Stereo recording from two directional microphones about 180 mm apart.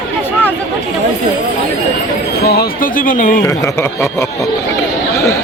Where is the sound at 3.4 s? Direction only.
15° left (ahead or behind).